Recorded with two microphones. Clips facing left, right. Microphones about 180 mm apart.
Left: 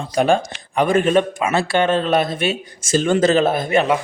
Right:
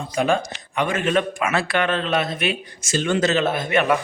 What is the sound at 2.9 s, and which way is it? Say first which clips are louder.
Speech: left 5 dB; 40° left (ahead or behind).